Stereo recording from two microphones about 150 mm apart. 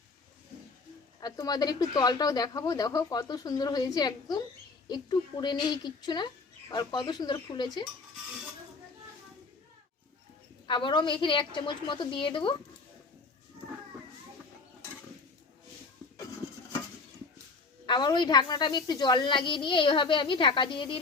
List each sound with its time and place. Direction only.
1.2 s speech: 25° left (ahead or behind)
10.7 s a woman's voice: 30° left (ahead or behind)
17.8 s a woman's voice: 30° left (ahead or behind)